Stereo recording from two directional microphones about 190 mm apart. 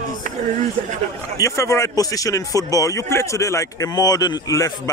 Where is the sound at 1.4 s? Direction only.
15° left (ahead or behind).